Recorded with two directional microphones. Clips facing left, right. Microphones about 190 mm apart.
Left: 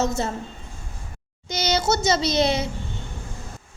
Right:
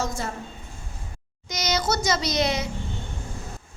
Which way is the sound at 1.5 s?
30° left (ahead or behind).